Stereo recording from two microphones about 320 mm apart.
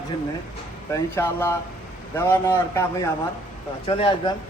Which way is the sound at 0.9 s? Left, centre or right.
Centre.